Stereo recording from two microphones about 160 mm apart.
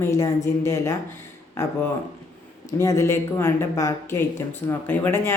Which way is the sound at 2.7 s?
15° left (ahead or behind).